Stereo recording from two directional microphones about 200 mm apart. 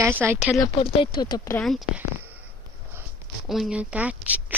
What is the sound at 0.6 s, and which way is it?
Speech, 25° left (ahead or behind).